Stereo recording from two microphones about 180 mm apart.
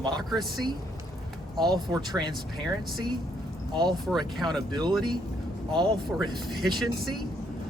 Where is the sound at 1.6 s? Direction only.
25° right (ahead or behind).